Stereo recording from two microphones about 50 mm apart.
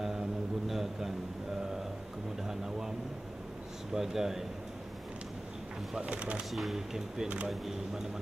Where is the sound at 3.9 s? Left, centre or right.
Centre.